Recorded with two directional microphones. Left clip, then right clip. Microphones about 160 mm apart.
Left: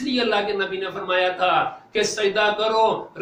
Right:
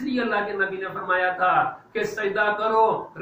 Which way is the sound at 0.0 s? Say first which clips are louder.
Left 3 dB; 20° left (ahead or behind).